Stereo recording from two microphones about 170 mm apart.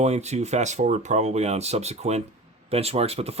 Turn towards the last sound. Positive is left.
turn(degrees=-35)  # may be behind; listen again after turning